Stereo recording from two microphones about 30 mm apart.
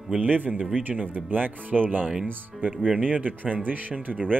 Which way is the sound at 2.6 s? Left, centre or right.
Right.